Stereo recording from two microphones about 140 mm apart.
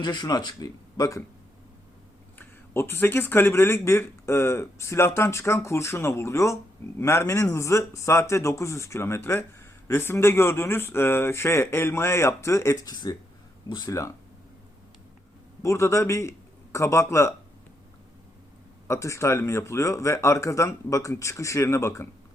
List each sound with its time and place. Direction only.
0.0 s speech: 30° left (ahead or behind)
2.4 s speech: 15° left (ahead or behind)
15.6 s speech: 20° left (ahead or behind)
18.9 s speech: 20° left (ahead or behind)